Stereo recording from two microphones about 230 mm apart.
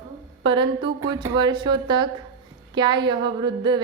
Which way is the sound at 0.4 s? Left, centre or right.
Right.